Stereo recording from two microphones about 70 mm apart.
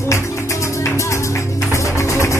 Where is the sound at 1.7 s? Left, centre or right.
Left.